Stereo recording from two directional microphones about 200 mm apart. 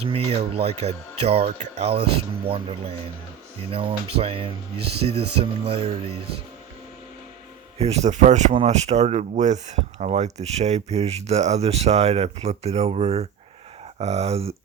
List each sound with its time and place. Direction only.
0.0 s speech: 30° right (ahead or behind)
7.8 s speech: 35° right (ahead or behind)